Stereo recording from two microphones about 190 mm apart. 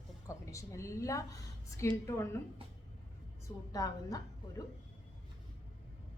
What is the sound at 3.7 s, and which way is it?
Speech, 20° left (ahead or behind).